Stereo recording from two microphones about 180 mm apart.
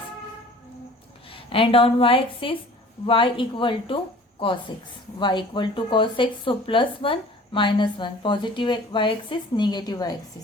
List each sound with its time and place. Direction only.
1.3 s a woman's voice: 30° left (ahead or behind)